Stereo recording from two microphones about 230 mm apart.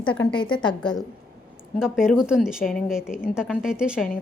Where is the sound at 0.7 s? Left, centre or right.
Centre.